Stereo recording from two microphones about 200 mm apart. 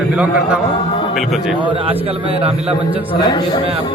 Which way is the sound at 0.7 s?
25° left (ahead or behind).